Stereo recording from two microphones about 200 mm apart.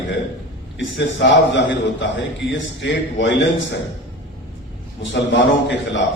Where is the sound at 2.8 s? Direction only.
60° left (ahead or behind).